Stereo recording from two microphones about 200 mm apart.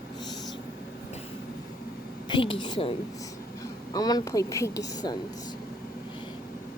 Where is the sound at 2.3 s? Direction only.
25° left (ahead or behind).